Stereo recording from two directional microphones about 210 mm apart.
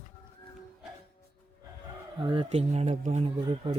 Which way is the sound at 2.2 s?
20° right (ahead or behind).